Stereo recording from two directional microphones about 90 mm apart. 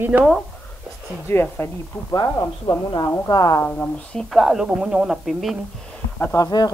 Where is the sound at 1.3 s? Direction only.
25° left (ahead or behind).